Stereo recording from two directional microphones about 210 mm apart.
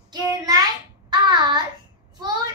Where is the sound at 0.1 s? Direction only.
15° right (ahead or behind).